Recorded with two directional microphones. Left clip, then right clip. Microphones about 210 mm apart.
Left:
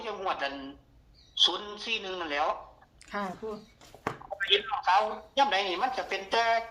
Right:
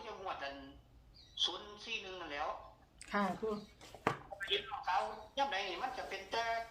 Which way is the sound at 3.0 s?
5° left (ahead or behind).